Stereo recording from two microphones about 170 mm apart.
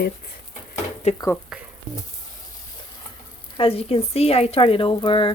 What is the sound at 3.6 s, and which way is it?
Speech, 35° left (ahead or behind).